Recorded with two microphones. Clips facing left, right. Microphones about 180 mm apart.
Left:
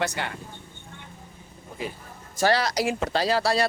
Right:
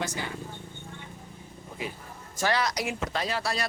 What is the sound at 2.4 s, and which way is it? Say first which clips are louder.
Speech: left 5 dB; 35° left (ahead or behind).